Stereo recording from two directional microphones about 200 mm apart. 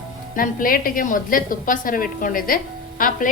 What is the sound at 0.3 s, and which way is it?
A woman's voice, 45° left (ahead or behind).